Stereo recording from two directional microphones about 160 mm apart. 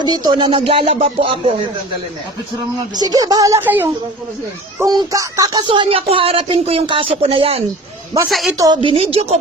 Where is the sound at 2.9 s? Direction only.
25° right (ahead or behind).